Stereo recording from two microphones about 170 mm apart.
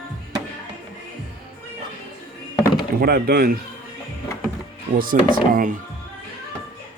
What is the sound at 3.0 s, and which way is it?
Speech, 65° right (ahead or behind).